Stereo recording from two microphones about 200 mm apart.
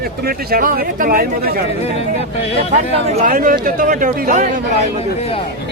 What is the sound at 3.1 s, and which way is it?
Speech, 40° right (ahead or behind).